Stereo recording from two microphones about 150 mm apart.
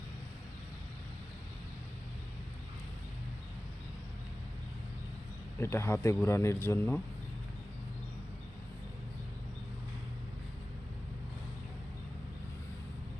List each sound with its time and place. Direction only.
5.5 s a man's voice: 15° left (ahead or behind)